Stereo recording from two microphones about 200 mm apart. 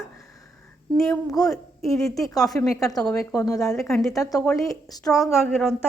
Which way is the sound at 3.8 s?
Centre (ahead or behind).